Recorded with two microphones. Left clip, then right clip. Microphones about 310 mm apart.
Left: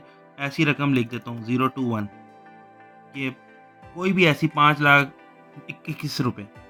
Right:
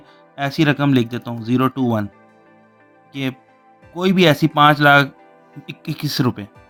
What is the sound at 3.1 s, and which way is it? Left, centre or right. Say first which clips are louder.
Speech: right 4 dB; right.